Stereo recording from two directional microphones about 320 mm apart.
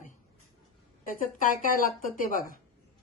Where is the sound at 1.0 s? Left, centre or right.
Left.